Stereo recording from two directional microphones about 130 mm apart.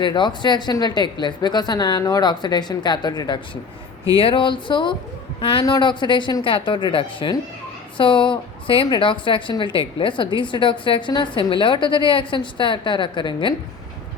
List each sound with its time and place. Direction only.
0.0 s a woman's voice: 35° left (ahead or behind)